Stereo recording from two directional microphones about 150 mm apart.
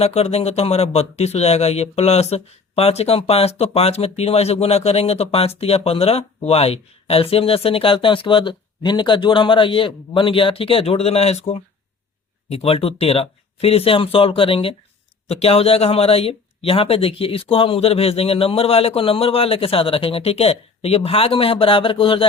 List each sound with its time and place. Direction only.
0.0 s speech: 45° left (ahead or behind)
12.5 s speech: 40° left (ahead or behind)